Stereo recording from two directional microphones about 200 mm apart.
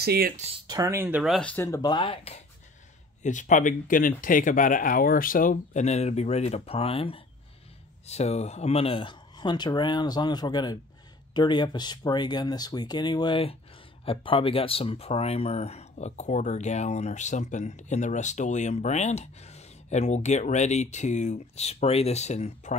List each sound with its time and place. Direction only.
0.0 s speech: 50° right (ahead or behind)
0.7 s speech: 15° right (ahead or behind); by 2.3 s 25° left (ahead or behind)
3.2 s speech: 40° left (ahead or behind)